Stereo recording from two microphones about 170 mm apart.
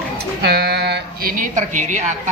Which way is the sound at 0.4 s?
70° right (ahead or behind).